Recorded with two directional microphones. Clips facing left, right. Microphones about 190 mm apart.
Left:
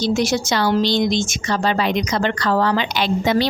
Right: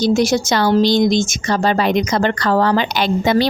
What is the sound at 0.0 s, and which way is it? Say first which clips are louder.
A woman's voice: right 4 dB; 45° right (ahead or behind).